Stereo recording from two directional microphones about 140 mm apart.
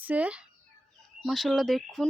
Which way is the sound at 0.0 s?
10° right (ahead or behind).